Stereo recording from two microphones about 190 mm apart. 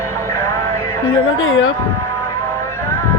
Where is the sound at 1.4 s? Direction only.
90° left.